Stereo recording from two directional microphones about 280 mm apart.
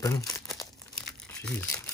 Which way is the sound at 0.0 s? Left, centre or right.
Centre.